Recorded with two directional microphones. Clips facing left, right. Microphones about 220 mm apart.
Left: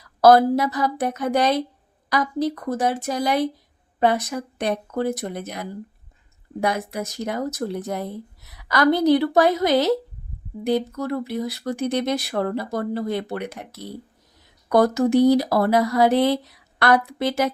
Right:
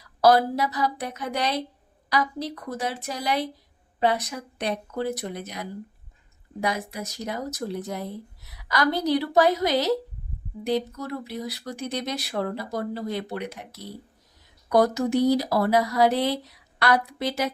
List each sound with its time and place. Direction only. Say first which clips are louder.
0.2 s speech: left 5 dB; 50° left (ahead or behind)
14.7 s speech: left 4 dB; 55° left (ahead or behind)